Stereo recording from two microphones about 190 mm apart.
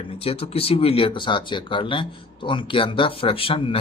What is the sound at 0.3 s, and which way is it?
Speech, 30° left (ahead or behind).